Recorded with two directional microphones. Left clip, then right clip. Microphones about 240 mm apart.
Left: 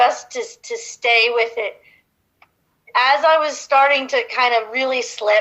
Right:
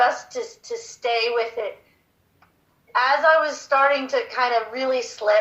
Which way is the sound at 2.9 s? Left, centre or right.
Left.